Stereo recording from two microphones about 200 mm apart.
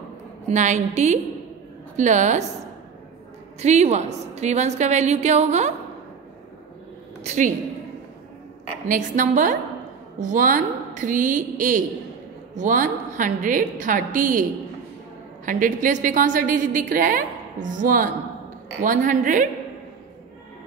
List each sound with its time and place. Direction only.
0.5 s a woman's voice: 35° right (ahead or behind)
3.6 s a woman's voice: 35° right (ahead or behind)
7.2 s a woman's voice: 40° right (ahead or behind)
8.8 s a woman's voice: 40° right (ahead or behind)
15.4 s a woman's voice: 40° right (ahead or behind)